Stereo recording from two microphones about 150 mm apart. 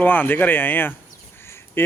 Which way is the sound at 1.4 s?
15° left (ahead or behind).